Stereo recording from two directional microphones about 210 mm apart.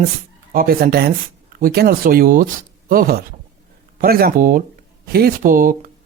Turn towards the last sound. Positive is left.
turn(degrees=-40)  # may be behind; listen again after turning